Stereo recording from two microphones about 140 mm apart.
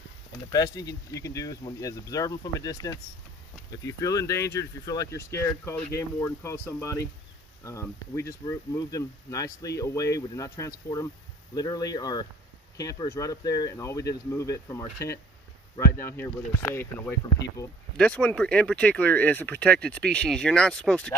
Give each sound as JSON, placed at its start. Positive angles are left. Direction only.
{"t": 0.5, "sound": "speech", "side_deg": 30}
{"t": 17.9, "sound": "speech", "side_deg": 10}